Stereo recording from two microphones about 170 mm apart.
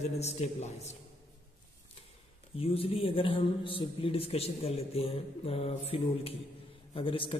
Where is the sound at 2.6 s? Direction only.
35° left (ahead or behind).